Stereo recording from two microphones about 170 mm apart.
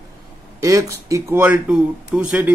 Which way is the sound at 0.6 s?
20° right (ahead or behind).